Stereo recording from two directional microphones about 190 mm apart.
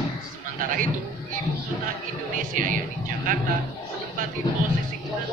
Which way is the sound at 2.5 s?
45° right (ahead or behind).